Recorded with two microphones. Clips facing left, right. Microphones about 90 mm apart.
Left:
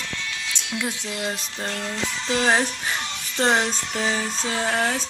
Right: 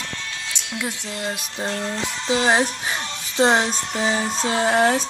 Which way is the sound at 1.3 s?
10° right (ahead or behind).